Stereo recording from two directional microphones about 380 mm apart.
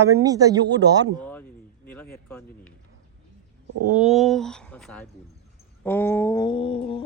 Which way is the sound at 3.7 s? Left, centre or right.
Right.